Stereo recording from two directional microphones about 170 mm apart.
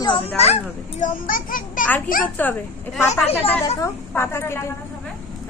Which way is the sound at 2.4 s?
10° left (ahead or behind).